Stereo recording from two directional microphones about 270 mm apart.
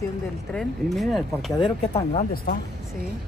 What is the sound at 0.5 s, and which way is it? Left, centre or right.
Speech, centre.